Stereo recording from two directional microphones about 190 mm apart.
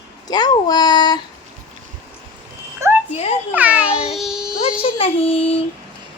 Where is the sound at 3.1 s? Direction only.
35° left (ahead or behind).